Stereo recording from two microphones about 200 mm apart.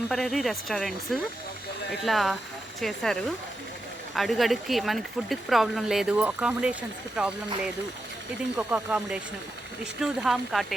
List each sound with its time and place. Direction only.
0.1 s speech: centre (ahead or behind)